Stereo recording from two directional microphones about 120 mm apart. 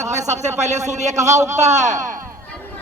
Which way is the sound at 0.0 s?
70° right (ahead or behind).